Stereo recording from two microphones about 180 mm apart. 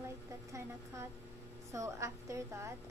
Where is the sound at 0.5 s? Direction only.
15° right (ahead or behind).